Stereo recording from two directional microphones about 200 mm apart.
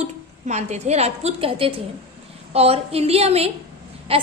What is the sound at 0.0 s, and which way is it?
A woman's voice, 35° right (ahead or behind).